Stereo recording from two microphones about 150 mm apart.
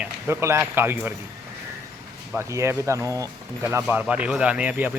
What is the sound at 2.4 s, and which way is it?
Speech, 20° right (ahead or behind).